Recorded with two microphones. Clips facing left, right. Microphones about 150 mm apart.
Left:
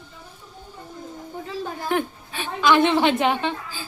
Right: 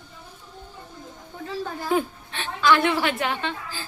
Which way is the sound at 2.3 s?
15° left (ahead or behind).